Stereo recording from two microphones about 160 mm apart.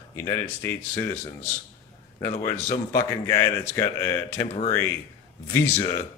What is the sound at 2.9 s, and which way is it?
Speech, 15° left (ahead or behind).